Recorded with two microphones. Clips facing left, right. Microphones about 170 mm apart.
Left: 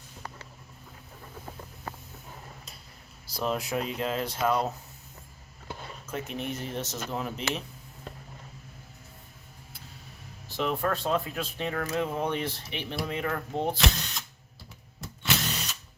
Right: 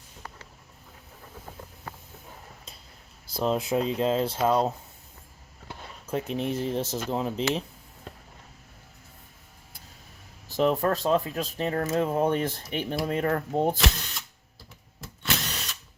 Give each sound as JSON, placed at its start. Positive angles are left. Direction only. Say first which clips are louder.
{"t": 3.2, "sound": "speech", "louder": "right 4 dB", "side_deg": -25}
{"t": 6.1, "sound": "speech", "louder": "right 6 dB", "side_deg": -30}
{"t": 10.5, "sound": "speech", "louder": "right 5 dB", "side_deg": -40}
{"t": 15.0, "sound": "a sound", "louder": "left 1 dB", "side_deg": 0}